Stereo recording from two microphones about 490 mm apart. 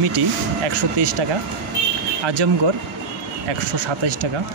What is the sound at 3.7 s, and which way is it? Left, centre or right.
Speech, right.